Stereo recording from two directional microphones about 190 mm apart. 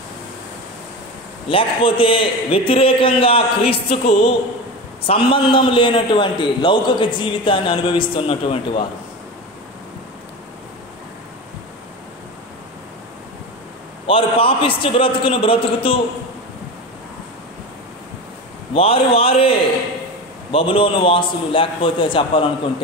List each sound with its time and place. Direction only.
1.5 s a man's voice: 30° left (ahead or behind)
14.0 s a man's voice: 30° left (ahead or behind)
18.8 s a man's voice: 30° left (ahead or behind)